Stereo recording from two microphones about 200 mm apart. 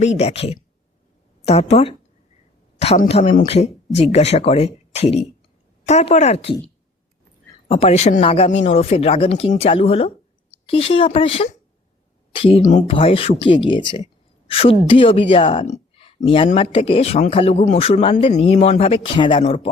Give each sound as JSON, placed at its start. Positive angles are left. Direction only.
{"t": 0.0, "sound": "speech", "side_deg": 35}
{"t": 7.7, "sound": "speech", "side_deg": 30}